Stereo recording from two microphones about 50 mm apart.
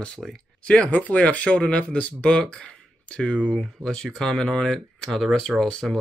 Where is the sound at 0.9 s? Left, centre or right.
Left.